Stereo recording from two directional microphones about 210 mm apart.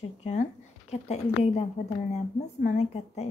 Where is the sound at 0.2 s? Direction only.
30° left (ahead or behind).